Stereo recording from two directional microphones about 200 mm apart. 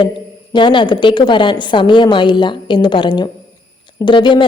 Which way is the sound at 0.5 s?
25° left (ahead or behind).